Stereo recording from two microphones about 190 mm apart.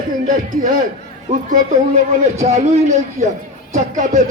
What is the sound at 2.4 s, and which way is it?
A man's voice, 35° right (ahead or behind).